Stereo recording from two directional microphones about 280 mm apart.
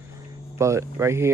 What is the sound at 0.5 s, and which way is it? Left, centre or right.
Speech, centre.